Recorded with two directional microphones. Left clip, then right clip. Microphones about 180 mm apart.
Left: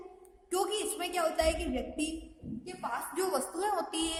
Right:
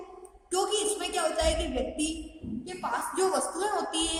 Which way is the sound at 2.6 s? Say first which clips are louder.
Right 5 dB; 45° left (ahead or behind).